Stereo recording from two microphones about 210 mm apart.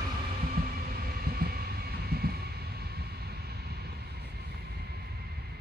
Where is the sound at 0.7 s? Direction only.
45° right (ahead or behind).